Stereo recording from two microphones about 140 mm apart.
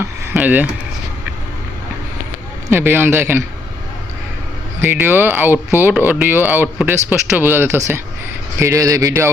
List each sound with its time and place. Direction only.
0.3 s speech: 10° right (ahead or behind)
2.6 s speech: 15° right (ahead or behind)
4.8 s a man's voice: 15° right (ahead or behind)